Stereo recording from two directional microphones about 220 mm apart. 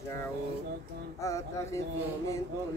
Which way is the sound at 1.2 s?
15° left (ahead or behind).